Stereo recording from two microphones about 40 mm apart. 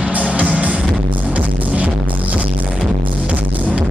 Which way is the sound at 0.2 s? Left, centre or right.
Right.